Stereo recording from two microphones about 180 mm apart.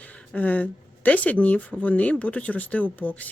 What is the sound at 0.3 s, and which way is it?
Speech, 10° left (ahead or behind).